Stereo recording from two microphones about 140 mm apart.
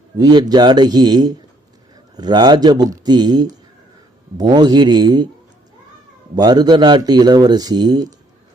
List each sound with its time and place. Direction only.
0.2 s speech: 30° right (ahead or behind)
6.3 s speech: 30° right (ahead or behind)